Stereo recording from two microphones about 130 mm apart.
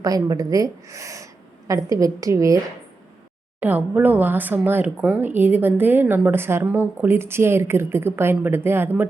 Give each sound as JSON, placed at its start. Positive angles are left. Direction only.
{"t": 0.0, "sound": "speech", "side_deg": -30}
{"t": 3.6, "sound": "speech", "side_deg": -15}